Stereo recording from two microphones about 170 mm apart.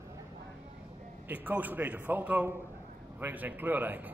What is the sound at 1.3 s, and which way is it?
A man's voice, 10° right (ahead or behind).